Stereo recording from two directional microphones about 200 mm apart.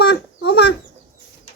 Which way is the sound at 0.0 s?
55° left (ahead or behind).